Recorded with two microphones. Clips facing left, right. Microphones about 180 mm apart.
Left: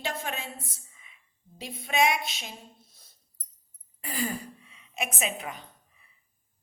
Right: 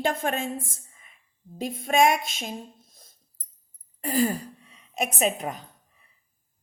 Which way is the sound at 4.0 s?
45° right (ahead or behind).